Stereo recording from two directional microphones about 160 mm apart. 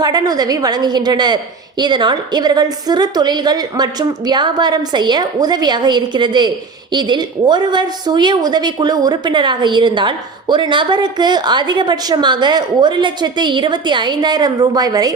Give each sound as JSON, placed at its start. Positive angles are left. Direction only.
{"t": 0.0, "sound": "a woman's voice", "side_deg": -25}